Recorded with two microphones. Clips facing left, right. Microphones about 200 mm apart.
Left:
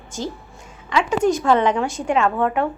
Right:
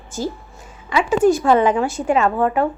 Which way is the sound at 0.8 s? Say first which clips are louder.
Right 3 dB; 5° right (ahead or behind).